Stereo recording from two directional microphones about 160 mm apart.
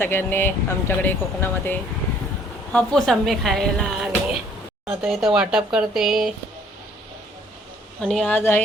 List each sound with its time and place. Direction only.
0.0 s speech: 15° left (ahead or behind); by 6.3 s centre (ahead or behind)
8.0 s speech: 5° left (ahead or behind)